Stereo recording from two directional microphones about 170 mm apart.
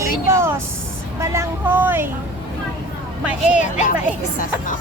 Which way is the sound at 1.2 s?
15° right (ahead or behind).